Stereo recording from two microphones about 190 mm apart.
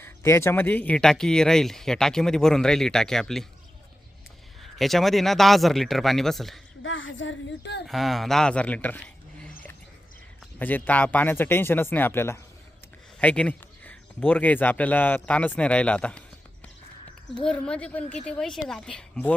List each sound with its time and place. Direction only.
0.0 s speech: 15° left (ahead or behind)
4.6 s speech: centre (ahead or behind)
6.8 s speech: 90° left; by 7.8 s 70° left (ahead or behind)
7.9 s speech: centre (ahead or behind)
10.6 s speech: 10° left (ahead or behind)
17.4 s speech: 5° left (ahead or behind)